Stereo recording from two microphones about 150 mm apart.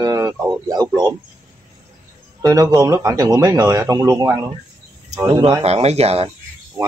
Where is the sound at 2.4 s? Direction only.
25° right (ahead or behind).